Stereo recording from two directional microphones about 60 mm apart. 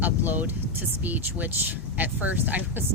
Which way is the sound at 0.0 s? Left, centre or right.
Right.